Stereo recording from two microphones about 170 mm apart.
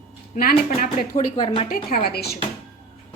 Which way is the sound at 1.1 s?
30° left (ahead or behind).